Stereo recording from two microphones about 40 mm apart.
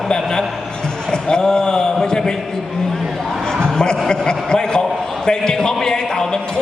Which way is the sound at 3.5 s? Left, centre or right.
Centre.